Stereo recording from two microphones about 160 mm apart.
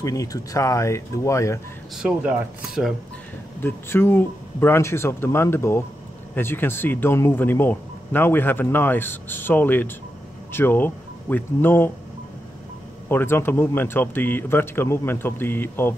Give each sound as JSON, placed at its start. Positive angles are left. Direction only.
{"t": 0.0, "sound": "speech", "side_deg": 20}
{"t": 2.0, "sound": "speech", "side_deg": -5}
{"t": 3.6, "sound": "speech", "side_deg": 15}
{"t": 13.1, "sound": "speech", "side_deg": 15}